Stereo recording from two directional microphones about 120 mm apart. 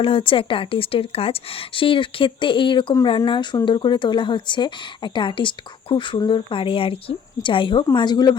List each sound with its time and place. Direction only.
0.0 s speech: 50° left (ahead or behind)